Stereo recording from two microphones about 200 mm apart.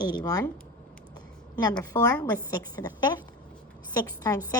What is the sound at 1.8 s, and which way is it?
A woman's voice, 15° left (ahead or behind).